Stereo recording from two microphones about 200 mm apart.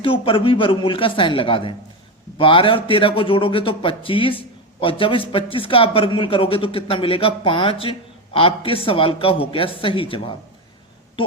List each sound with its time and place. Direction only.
0.0 s a man's voice: 25° left (ahead or behind)